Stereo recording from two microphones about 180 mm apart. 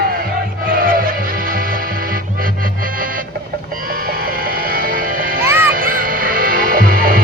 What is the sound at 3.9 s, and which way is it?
Music, 55° right (ahead or behind).